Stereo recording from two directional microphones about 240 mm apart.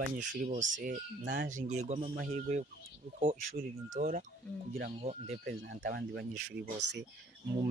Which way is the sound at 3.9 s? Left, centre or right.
Right.